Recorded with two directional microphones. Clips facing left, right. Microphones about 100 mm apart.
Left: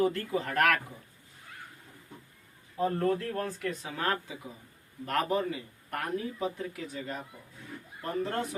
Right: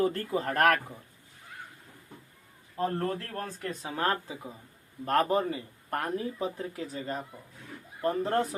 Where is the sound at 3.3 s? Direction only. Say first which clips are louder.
Left 2 dB; 35° right (ahead or behind).